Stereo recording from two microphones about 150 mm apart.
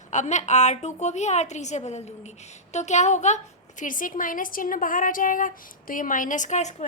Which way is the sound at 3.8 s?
65° left (ahead or behind).